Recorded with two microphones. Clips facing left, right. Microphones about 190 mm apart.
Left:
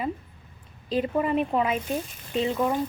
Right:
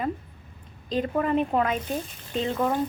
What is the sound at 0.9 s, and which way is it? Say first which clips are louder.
Speech: even; 5° left (ahead or behind).